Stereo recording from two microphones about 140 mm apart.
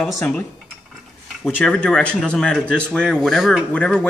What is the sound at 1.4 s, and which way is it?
Speech, 10° left (ahead or behind).